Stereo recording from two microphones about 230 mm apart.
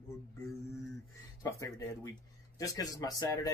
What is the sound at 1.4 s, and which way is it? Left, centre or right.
Speech, centre.